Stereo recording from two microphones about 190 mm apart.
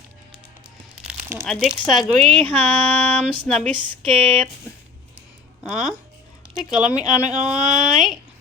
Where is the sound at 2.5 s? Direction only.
10° left (ahead or behind).